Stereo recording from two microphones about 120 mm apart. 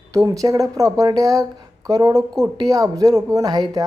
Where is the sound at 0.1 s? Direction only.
30° right (ahead or behind).